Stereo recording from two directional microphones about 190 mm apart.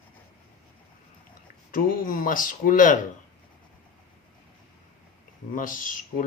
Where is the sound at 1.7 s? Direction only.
45° left (ahead or behind).